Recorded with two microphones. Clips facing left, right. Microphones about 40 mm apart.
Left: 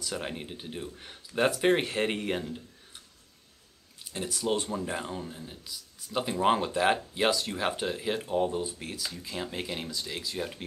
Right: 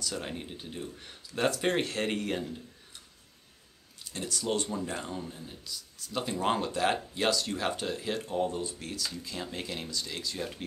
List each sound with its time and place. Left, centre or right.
0.0 s speech: centre
4.0 s speech: centre